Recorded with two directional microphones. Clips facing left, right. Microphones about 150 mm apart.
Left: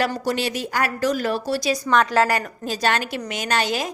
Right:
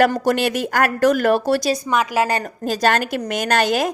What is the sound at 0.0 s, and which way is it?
A woman's voice, 50° right (ahead or behind).